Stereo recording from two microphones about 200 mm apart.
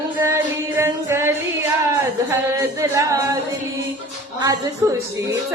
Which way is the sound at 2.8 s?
15° right (ahead or behind).